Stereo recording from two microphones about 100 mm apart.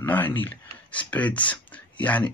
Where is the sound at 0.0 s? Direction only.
20° left (ahead or behind).